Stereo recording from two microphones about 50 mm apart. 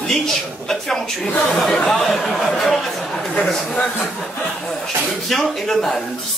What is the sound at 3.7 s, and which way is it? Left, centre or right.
Speech, left.